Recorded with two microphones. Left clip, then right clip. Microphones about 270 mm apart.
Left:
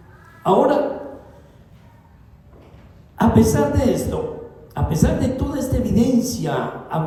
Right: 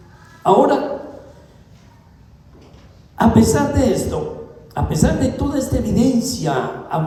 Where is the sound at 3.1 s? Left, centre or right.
Right.